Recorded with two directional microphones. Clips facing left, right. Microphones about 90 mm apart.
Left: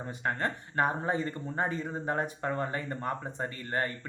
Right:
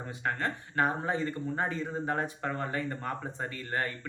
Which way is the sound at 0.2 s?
30° left (ahead or behind).